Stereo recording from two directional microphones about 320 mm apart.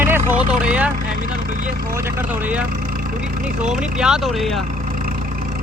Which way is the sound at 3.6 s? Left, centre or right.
Centre.